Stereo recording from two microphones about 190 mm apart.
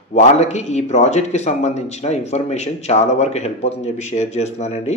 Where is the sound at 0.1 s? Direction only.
35° left (ahead or behind).